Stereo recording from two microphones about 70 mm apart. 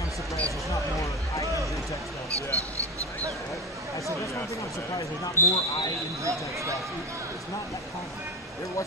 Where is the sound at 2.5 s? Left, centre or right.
Right.